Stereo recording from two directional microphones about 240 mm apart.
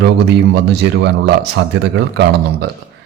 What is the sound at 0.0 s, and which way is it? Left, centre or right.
Speech, right.